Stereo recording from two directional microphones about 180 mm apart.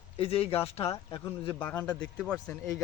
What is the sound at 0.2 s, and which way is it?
Speech, 35° left (ahead or behind).